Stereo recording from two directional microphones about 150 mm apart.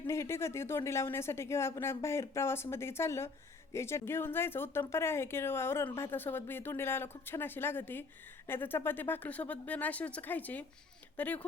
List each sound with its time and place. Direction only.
0.1 s speech: 15° left (ahead or behind)